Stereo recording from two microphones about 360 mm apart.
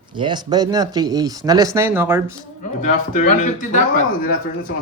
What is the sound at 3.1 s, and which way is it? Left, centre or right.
Speech, left.